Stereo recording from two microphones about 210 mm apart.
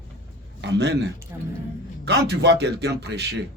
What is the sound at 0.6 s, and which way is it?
Speech, 55° right (ahead or behind).